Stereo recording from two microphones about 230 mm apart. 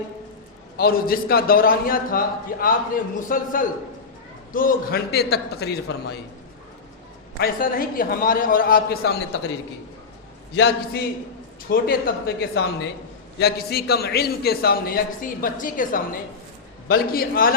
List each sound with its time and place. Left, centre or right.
0.8 s a man's voice: left
7.3 s a man's voice: left
10.5 s a man's voice: left